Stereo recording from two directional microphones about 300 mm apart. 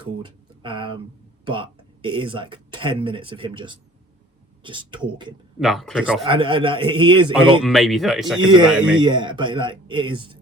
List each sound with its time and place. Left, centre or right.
0.0 s speech: centre
5.5 s speech: centre
6.2 s speech: centre
7.6 s speech: centre
9.0 s speech: centre